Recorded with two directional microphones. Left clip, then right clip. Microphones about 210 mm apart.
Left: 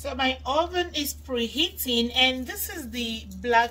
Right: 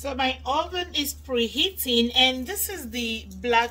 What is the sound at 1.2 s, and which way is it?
Speech, 40° right (ahead or behind).